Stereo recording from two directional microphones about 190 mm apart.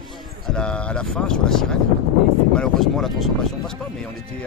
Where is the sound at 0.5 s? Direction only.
5° left (ahead or behind).